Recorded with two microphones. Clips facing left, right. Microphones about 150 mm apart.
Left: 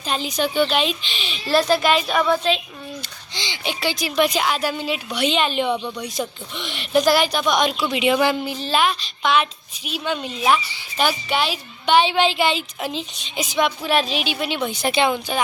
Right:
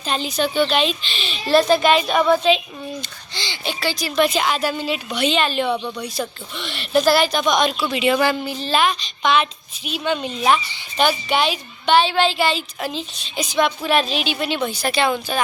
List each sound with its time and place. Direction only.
0.0 s speech: 10° left (ahead or behind)
1.5 s a child's voice: centre (ahead or behind)
3.3 s speech: 15° left (ahead or behind)
5.7 s a child's voice: 5° right (ahead or behind)
6.1 s a child's voice: 15° left (ahead or behind)
11.9 s a woman's voice: 15° left (ahead or behind)